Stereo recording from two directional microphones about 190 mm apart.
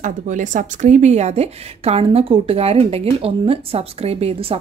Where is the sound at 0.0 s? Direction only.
40° right (ahead or behind).